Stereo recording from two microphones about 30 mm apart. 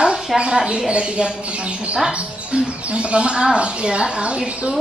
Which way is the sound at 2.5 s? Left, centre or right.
Right.